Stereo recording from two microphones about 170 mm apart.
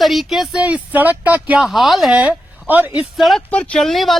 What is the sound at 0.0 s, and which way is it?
Speech, centre (ahead or behind).